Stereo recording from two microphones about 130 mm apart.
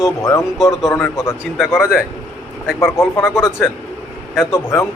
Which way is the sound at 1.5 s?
5° right (ahead or behind).